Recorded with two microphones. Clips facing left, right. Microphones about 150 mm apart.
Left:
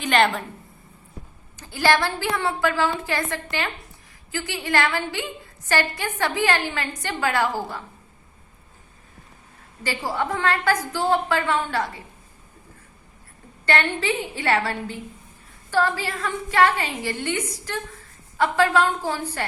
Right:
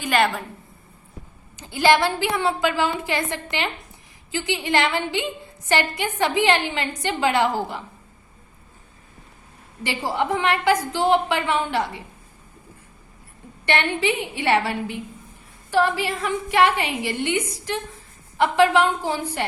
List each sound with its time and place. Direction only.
0.0 s a woman's voice: 5° right (ahead or behind)
1.5 s a woman's voice: 20° right (ahead or behind)
9.8 s a woman's voice: 20° right (ahead or behind)
13.7 s a woman's voice: 20° right (ahead or behind)